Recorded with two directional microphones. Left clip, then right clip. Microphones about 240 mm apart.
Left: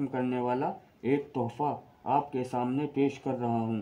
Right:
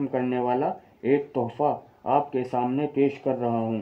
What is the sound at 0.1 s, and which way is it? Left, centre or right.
Speech, left.